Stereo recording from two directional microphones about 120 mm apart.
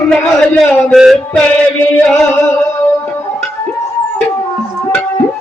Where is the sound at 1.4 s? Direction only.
10° left (ahead or behind).